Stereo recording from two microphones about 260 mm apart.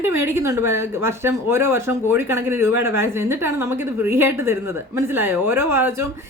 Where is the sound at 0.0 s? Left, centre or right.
Centre.